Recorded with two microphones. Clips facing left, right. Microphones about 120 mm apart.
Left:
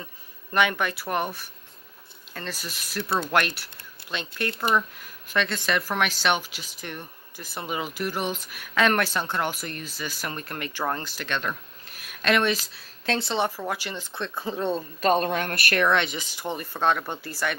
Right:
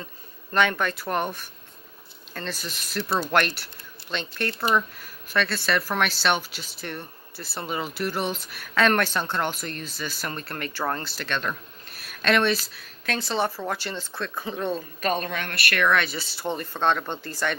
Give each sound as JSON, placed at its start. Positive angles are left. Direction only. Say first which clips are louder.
{"t": 0.5, "sound": "speech", "louder": "right 1 dB", "side_deg": 15}
{"t": 12.7, "sound": "speech", "louder": "left 3 dB", "side_deg": 25}
{"t": 14.7, "sound": "speech", "louder": "left 5 dB", "side_deg": 30}